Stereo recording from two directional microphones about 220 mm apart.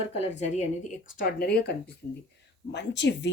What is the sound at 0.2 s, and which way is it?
Speech, 30° left (ahead or behind).